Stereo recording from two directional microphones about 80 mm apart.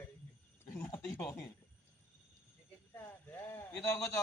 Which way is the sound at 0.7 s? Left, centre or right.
Left.